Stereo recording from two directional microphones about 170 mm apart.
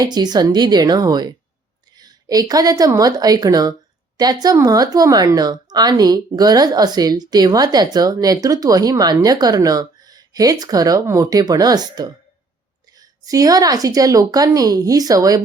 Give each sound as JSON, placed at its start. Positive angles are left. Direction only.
{"t": 0.0, "sound": "a woman's voice", "side_deg": -25}